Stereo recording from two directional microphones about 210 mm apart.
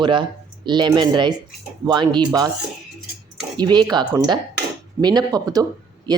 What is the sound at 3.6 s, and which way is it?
Speech, 20° right (ahead or behind).